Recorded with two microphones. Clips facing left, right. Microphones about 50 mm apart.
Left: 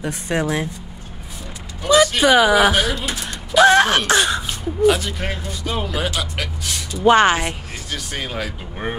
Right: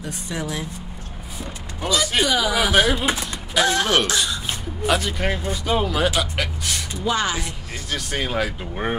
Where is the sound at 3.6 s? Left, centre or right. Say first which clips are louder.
Left 7 dB; left.